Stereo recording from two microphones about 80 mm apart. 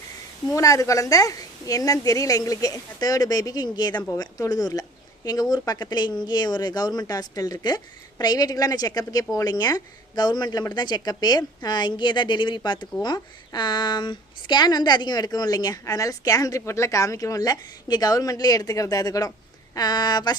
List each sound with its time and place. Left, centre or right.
0.5 s a woman's voice: left